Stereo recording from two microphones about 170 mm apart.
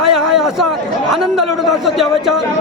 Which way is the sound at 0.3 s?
Centre (ahead or behind).